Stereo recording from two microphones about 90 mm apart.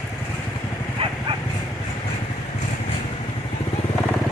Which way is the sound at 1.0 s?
85° right.